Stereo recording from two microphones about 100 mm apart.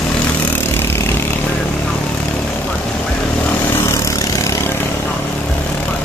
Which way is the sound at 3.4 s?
25° left (ahead or behind).